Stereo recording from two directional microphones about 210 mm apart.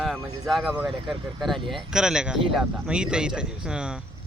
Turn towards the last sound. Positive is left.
turn(degrees=-5)  # may be behind; listen again after turning